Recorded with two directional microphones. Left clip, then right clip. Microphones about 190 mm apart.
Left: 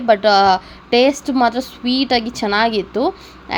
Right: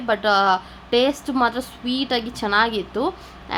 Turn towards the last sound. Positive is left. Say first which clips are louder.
# left 5 dB
turn(degrees=20)  # may be behind; listen again after turning